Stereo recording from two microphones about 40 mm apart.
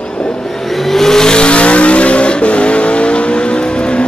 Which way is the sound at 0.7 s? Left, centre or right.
Centre.